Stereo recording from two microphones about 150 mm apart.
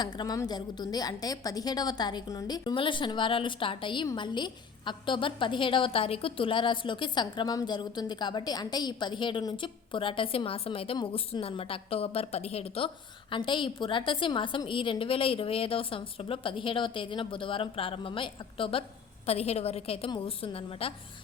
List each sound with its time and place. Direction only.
0.0 s a woman's voice: 25° left (ahead or behind)